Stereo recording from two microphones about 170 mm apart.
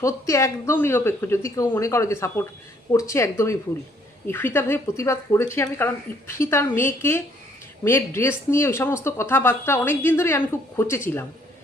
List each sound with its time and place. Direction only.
0.0 s speech: 15° left (ahead or behind)